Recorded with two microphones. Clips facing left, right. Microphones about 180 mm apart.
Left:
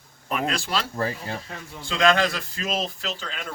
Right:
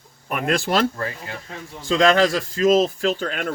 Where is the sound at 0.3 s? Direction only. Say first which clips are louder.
Right 5 dB; 50° right (ahead or behind).